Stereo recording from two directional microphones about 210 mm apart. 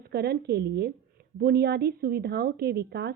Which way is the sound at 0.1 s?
50° right (ahead or behind).